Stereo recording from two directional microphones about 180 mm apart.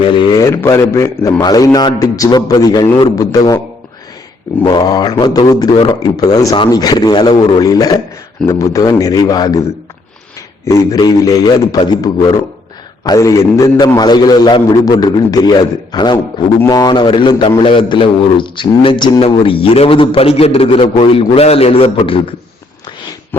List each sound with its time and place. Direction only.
0.1 s a man's voice: 25° left (ahead or behind)
4.6 s a man's voice: 20° left (ahead or behind)
10.7 s a man's voice: 20° left (ahead or behind)